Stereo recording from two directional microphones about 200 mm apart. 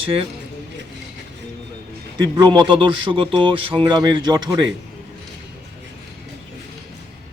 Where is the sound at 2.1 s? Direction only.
20° right (ahead or behind).